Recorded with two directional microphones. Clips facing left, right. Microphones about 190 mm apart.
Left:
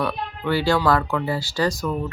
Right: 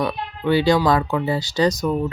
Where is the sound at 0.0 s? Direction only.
15° right (ahead or behind).